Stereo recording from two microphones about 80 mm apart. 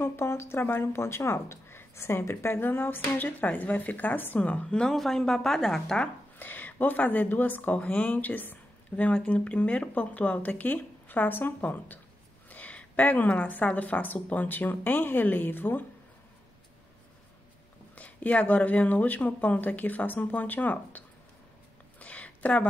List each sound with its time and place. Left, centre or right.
0.0 s speech: left; by 6.0 s centre
6.3 s speech: left
17.9 s speech: centre
22.0 s a sound: centre